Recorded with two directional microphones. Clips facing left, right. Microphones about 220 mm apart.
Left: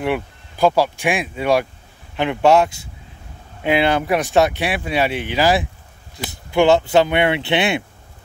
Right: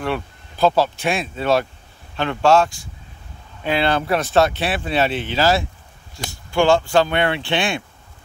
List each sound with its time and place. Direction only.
0.0 s speech: 15° left (ahead or behind)